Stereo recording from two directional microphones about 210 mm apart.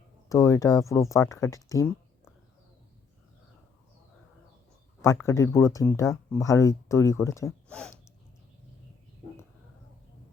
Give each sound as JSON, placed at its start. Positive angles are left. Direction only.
{"t": 0.3, "sound": "speech", "side_deg": 15}
{"t": 5.0, "sound": "speech", "side_deg": 15}